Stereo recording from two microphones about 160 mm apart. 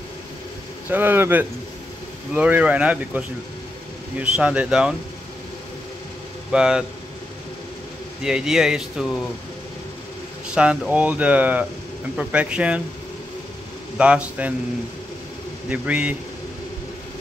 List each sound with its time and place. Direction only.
0.8 s speech: 10° right (ahead or behind)
6.5 s speech: 5° right (ahead or behind)
8.2 s speech: 5° right (ahead or behind)
10.5 s speech: 5° right (ahead or behind)
13.9 s speech: 5° right (ahead or behind)
15.7 s speech: 10° right (ahead or behind)